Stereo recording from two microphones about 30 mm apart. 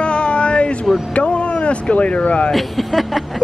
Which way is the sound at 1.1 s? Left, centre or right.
Left.